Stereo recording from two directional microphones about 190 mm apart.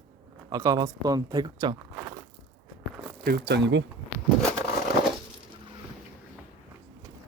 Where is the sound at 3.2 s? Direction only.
55° right (ahead or behind).